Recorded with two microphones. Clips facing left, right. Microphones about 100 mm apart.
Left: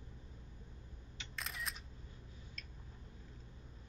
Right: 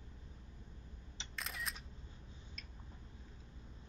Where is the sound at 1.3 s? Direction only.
Centre (ahead or behind).